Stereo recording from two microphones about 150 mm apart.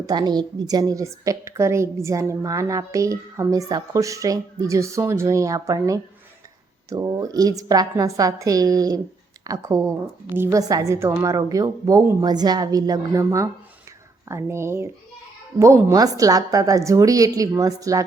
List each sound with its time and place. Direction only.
0.0 s a woman's voice: 30° right (ahead or behind)